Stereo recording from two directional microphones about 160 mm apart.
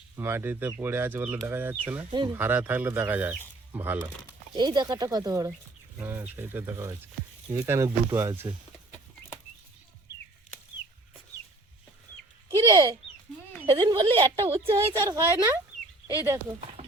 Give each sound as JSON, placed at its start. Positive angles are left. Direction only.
{"t": 0.2, "sound": "speech", "side_deg": -15}
{"t": 2.0, "sound": "speech", "side_deg": -30}
{"t": 2.3, "sound": "speech", "side_deg": -10}
{"t": 4.5, "sound": "speech", "side_deg": -25}
{"t": 12.5, "sound": "bird", "side_deg": -20}
{"t": 13.7, "sound": "a woman's voice", "side_deg": -35}
{"t": 15.0, "sound": "speech", "side_deg": -15}